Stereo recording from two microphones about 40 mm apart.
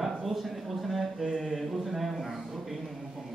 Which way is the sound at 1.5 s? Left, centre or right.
Centre.